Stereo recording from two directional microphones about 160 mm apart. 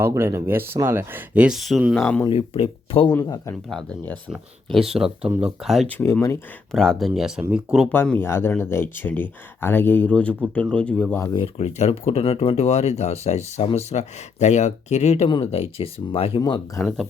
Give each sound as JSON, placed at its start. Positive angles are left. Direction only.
{"t": 0.0, "sound": "speech", "side_deg": -15}
{"t": 2.0, "sound": "speech", "side_deg": 10}
{"t": 2.2, "sound": "speech", "side_deg": 35}
{"t": 3.2, "sound": "speech", "side_deg": 20}
{"t": 3.7, "sound": "speech", "side_deg": 0}
{"t": 6.0, "sound": "speech", "side_deg": 15}
{"t": 6.7, "sound": "speech", "side_deg": 5}
{"t": 7.9, "sound": "speech", "side_deg": 10}
{"t": 11.2, "sound": "speech", "side_deg": 30}
{"t": 16.4, "sound": "speech", "side_deg": 20}